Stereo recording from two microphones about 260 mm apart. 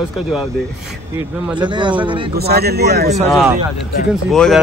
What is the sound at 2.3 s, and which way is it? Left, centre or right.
Mantra, right.